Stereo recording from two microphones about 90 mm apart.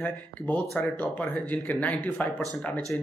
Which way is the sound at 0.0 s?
20° left (ahead or behind).